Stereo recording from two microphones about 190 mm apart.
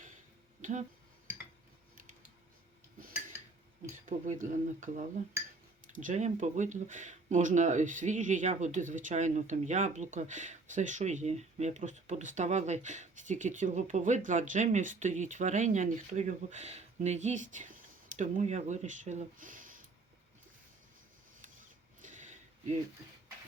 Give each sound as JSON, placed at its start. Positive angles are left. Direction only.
{"t": 0.6, "sound": "speech", "side_deg": -40}
{"t": 4.3, "sound": "speech", "side_deg": -45}
{"t": 22.0, "sound": "a sound", "side_deg": -40}